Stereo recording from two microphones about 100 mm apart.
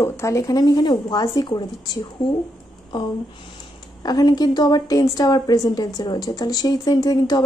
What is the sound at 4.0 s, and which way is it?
A woman's voice, 40° left (ahead or behind).